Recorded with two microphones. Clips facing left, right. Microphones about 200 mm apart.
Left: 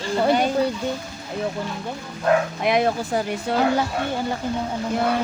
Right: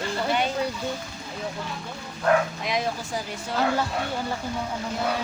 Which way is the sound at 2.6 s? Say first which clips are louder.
Left 8 dB; 60° left (ahead or behind).